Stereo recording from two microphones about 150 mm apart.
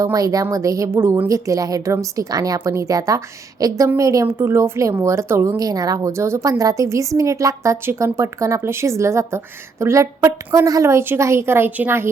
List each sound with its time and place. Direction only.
0.0 s a woman's voice: 25° right (ahead or behind)